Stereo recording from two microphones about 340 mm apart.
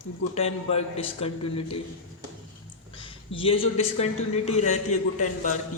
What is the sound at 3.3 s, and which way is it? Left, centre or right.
A man's voice, centre.